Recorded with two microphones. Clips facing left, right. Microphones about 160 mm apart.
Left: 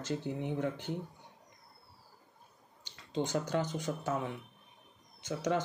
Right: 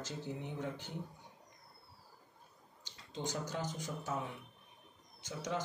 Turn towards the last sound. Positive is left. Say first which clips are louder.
# left 7 dB
turn(degrees=60)  # may be behind; listen again after turning